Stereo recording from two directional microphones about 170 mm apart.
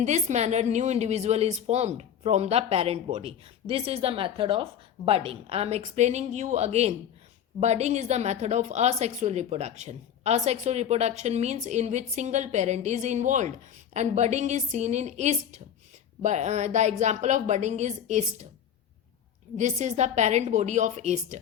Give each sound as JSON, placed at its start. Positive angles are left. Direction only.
{"t": 0.0, "sound": "a woman's voice", "side_deg": -45}
{"t": 19.5, "sound": "a woman's voice", "side_deg": -45}